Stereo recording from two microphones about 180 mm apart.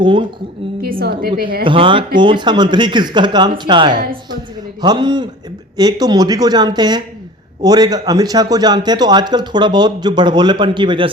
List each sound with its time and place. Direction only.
0.0 s a man's voice: 25° right (ahead or behind)
0.8 s a woman's voice: 55° right (ahead or behind)
1.6 s a man's voice: 30° right (ahead or behind)